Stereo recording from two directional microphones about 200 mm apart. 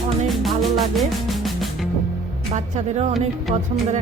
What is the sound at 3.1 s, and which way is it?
Music, centre (ahead or behind).